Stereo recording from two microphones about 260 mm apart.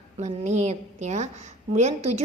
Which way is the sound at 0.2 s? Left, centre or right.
Right.